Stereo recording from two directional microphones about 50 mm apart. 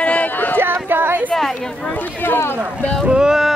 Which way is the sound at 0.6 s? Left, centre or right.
Right.